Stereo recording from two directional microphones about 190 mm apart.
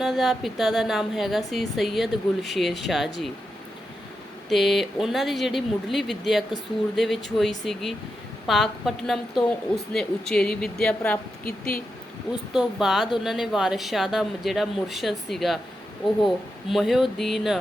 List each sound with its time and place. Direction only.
0.0 s a woman's voice: centre (ahead or behind)
4.4 s a woman's voice: centre (ahead or behind)
11.4 s speech: 50° left (ahead or behind)
12.5 s a woman's voice: centre (ahead or behind)